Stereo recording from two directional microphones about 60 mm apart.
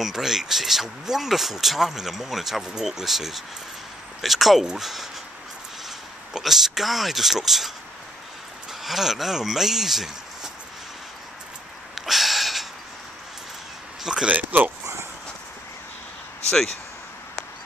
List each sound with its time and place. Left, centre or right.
0.0 s speech: centre
8.8 s speech: centre
11.9 s a sound: centre
14.0 s speech: centre
14.3 s speech: right
16.4 s speech: centre